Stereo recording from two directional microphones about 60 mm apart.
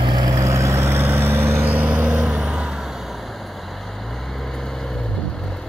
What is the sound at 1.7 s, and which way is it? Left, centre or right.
Vehicle, right.